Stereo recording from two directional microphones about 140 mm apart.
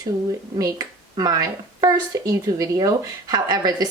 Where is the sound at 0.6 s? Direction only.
30° right (ahead or behind).